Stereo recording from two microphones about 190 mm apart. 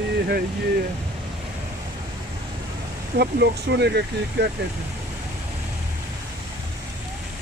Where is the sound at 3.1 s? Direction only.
60° right (ahead or behind).